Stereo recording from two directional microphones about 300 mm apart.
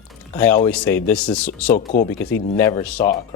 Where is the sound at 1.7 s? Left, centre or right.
Left.